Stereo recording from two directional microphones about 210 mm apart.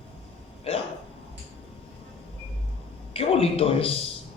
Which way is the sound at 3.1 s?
25° left (ahead or behind).